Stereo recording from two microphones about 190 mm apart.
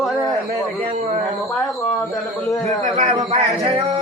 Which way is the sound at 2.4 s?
15° left (ahead or behind).